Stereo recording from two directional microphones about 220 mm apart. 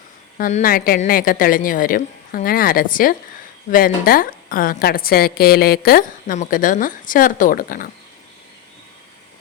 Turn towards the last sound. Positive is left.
turn(degrees=40)  # may be behind; listen again after turning